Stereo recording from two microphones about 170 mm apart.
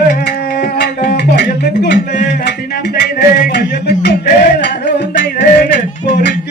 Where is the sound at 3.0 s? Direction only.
65° left (ahead or behind).